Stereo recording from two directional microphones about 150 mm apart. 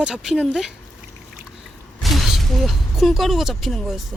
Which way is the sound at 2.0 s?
Centre (ahead or behind).